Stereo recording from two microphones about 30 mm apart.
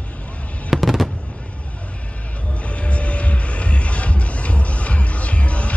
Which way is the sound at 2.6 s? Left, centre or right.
Left.